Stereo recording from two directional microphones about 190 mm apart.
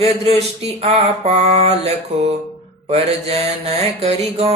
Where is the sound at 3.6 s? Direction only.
30° right (ahead or behind).